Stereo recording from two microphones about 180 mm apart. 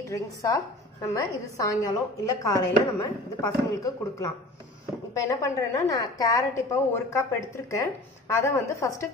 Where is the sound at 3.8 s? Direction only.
20° left (ahead or behind).